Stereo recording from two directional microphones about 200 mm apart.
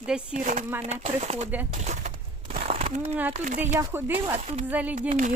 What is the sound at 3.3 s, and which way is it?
Speech, 40° right (ahead or behind).